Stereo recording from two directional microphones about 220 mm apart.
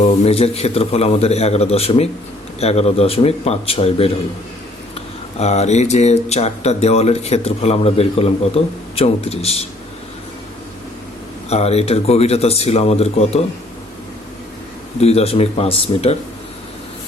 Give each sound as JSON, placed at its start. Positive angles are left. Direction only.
{"t": 0.0, "sound": "speech", "side_deg": 25}
{"t": 11.4, "sound": "speech", "side_deg": 30}
{"t": 15.0, "sound": "speech", "side_deg": 30}